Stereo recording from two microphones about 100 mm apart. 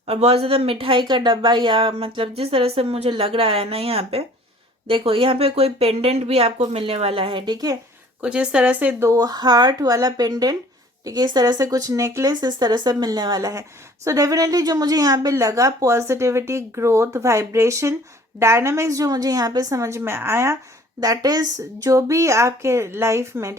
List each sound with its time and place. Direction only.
0.1 s speech: 75° right (ahead or behind)
4.9 s speech: 65° right (ahead or behind); by 7.8 s 45° right (ahead or behind)
8.2 s speech: 10° right (ahead or behind)
9.0 s a woman's voice: 40° right (ahead or behind)
12.3 s a woman's voice: 45° right (ahead or behind); by 20.6 s 25° right (ahead or behind)
21.0 s a woman's voice: 40° right (ahead or behind)